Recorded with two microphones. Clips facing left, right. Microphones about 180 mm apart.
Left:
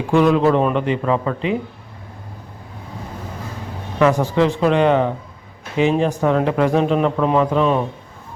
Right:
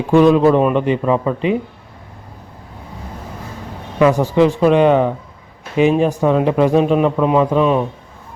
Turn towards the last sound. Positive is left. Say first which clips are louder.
# right 2 dB
turn(degrees=-15)  # may be behind; listen again after turning